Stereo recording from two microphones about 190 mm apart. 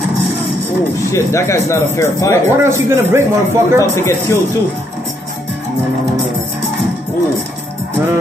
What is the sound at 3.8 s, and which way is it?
Speech, 15° left (ahead or behind).